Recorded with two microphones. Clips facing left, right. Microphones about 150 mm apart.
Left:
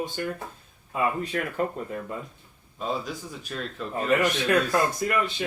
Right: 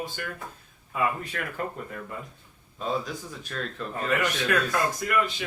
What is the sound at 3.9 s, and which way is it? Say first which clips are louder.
Speech: left 4 dB; 30° left (ahead or behind).